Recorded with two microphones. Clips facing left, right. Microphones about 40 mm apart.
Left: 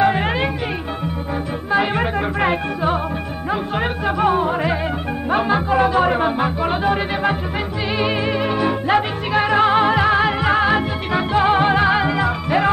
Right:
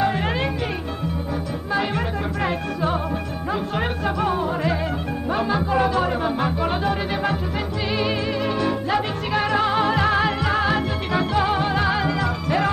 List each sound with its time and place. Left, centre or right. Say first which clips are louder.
0.0 s music: left 5 dB; left
1.7 s music: left 5 dB; left
6.4 s music: left 3 dB; centre